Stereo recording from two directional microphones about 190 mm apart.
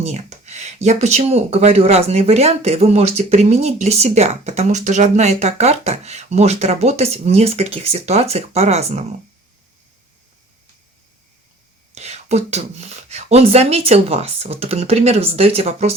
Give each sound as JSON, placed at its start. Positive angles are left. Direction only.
{"t": 0.0, "sound": "speech", "side_deg": -35}
{"t": 11.9, "sound": "speech", "side_deg": -35}